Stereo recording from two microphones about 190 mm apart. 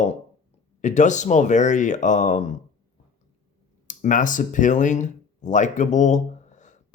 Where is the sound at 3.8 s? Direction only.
40° left (ahead or behind).